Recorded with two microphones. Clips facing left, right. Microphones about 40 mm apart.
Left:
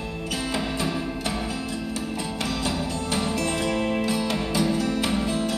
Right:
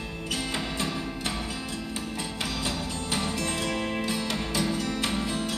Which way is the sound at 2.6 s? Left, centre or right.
Centre.